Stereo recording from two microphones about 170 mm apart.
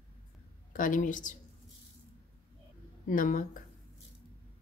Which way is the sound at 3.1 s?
50° left (ahead or behind).